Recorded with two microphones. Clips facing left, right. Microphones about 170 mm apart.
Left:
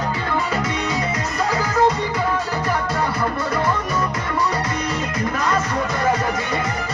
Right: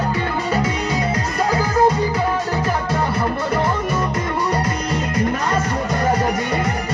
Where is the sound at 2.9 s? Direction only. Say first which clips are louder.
Right 2 dB; 30° right (ahead or behind).